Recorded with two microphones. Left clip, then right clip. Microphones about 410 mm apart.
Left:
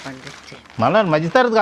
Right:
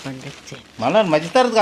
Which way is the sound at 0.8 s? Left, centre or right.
Left.